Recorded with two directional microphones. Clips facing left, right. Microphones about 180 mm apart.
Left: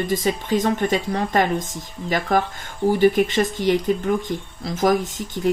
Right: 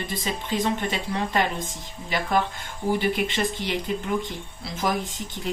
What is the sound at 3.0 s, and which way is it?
Speech, 45° left (ahead or behind).